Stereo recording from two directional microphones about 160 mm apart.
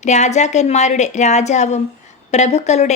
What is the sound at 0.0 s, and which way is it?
Speech, 45° left (ahead or behind).